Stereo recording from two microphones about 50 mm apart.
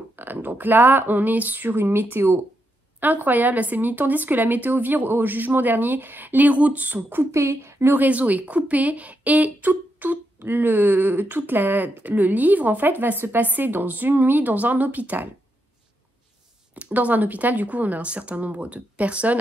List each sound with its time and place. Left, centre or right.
0.1 s a sound: right
2.0 s a woman's voice: right
7.2 s a woman's voice: right
7.9 s a woman's voice: right
16.7 s speech: right